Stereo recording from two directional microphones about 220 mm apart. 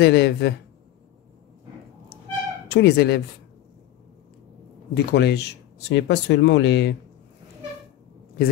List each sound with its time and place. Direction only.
0.0 s speech: 50° left (ahead or behind)
2.7 s speech: 50° left (ahead or behind)
4.9 s speech: 50° left (ahead or behind)